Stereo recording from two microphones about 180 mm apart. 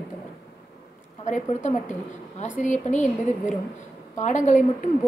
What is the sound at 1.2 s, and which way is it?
A woman's voice, 40° left (ahead or behind).